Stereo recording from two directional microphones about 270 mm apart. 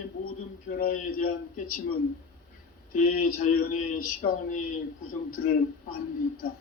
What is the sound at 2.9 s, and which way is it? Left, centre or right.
Speech, left.